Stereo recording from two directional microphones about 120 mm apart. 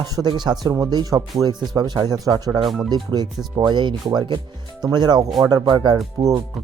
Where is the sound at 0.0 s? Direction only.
35° right (ahead or behind).